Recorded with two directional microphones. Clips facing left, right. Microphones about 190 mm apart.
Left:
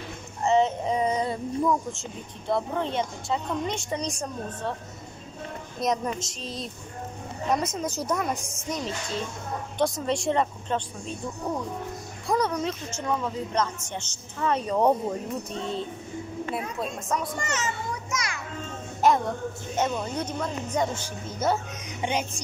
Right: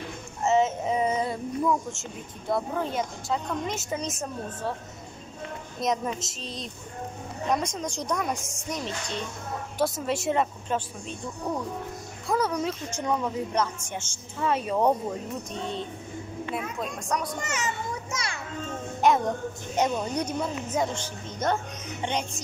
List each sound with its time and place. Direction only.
0.4 s speech: 5° right (ahead or behind)
5.8 s speech: centre (ahead or behind)
12.3 s a woman's voice: 5° right (ahead or behind)
16.4 s a woman's voice: 35° left (ahead or behind)
16.8 s speech: centre (ahead or behind)
18.1 s children playing: 30° right (ahead or behind)
18.9 s music: centre (ahead or behind)
19.8 s a woman's voice: 15° right (ahead or behind)
20.9 s speech: 5° left (ahead or behind)
22.0 s music: 10° left (ahead or behind)